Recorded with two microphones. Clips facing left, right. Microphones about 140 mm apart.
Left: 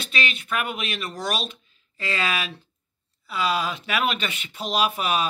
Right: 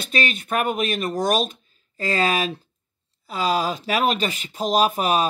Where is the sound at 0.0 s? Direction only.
45° right (ahead or behind).